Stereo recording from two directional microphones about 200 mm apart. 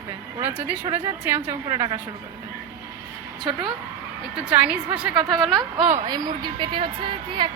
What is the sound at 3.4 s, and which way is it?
Speech, 25° right (ahead or behind).